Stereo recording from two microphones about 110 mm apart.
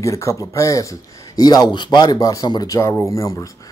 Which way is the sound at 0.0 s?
30° left (ahead or behind).